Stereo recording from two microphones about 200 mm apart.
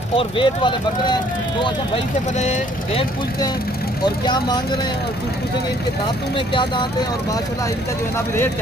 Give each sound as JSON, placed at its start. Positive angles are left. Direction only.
{"t": 0.1, "sound": "speech", "side_deg": 25}
{"t": 2.3, "sound": "speech", "side_deg": 35}
{"t": 4.0, "sound": "speech", "side_deg": 20}
{"t": 6.3, "sound": "speech", "side_deg": 25}